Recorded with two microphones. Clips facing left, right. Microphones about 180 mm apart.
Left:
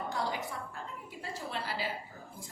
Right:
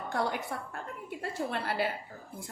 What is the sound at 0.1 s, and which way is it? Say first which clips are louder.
A woman's voice: right 7 dB; 60° right (ahead or behind).